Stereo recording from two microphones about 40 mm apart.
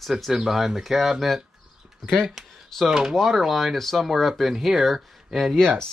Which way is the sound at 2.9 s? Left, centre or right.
Centre.